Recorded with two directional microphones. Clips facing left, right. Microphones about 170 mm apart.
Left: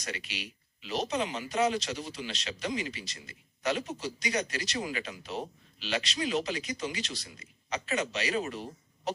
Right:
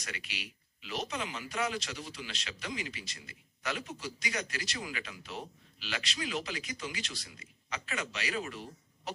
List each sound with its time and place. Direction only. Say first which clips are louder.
0.1 s a man's voice: left 5 dB; 25° left (ahead or behind)
7.1 s a man's voice: left 5 dB; 40° left (ahead or behind)
7.7 s a man's voice: left 7 dB; 20° left (ahead or behind)